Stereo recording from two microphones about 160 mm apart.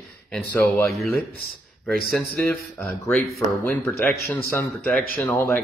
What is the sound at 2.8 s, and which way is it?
A man's voice, 10° left (ahead or behind).